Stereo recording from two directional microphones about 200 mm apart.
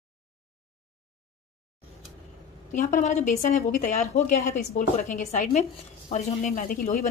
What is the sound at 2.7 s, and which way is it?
A woman's voice, 40° left (ahead or behind).